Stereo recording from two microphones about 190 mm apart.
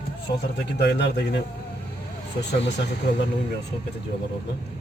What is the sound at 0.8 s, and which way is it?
Speech, 60° left (ahead or behind).